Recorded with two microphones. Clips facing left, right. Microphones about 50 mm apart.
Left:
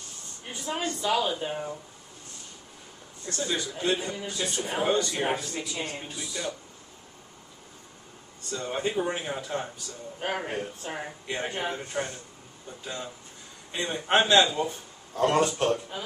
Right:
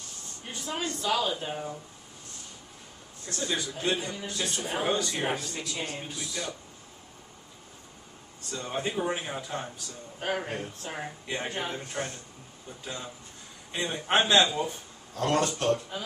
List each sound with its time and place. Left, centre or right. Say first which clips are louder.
0.5 s a woman's voice: left 2 dB; centre
3.3 s speech: left 1 dB; centre
8.5 s speech: left 2 dB; centre
15.1 s a woman's voice: left 3 dB; centre